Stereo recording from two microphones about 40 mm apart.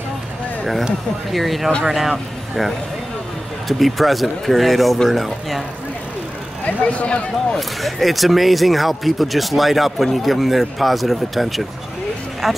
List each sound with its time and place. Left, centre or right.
1.3 s a man's voice: centre
6.6 s speech: left
7.5 s a man's voice: centre